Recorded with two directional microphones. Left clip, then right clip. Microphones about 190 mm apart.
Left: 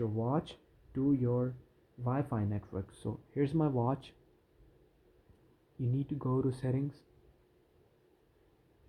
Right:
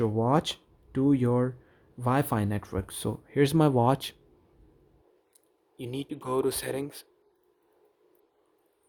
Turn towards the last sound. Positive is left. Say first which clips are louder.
# right 5 dB
turn(degrees=-40)  # may be behind; listen again after turning